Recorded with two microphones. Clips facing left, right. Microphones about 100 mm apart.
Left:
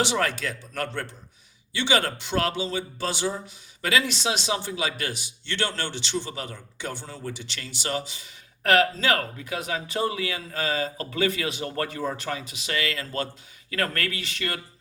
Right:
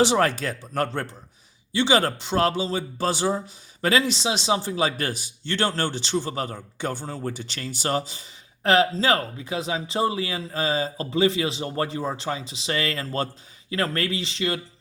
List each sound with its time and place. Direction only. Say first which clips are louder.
0.0 s speech: right 5 dB; 35° right (ahead or behind)